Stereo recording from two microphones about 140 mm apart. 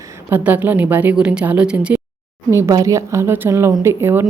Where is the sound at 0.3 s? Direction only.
15° right (ahead or behind).